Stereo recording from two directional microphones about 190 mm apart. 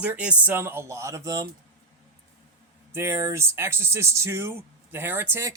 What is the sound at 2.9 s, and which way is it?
Speech, 15° right (ahead or behind).